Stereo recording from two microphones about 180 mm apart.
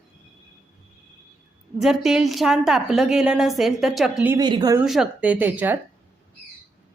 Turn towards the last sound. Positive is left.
turn(degrees=-10)  # may be behind; listen again after turning